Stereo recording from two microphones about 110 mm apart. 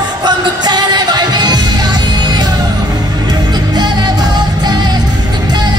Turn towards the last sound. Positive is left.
turn(degrees=-40)  # may be behind; listen again after turning